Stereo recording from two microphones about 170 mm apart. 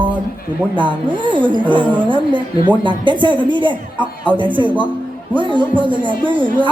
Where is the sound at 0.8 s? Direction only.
30° right (ahead or behind).